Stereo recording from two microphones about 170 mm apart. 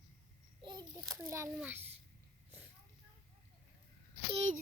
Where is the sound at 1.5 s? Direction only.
10° right (ahead or behind).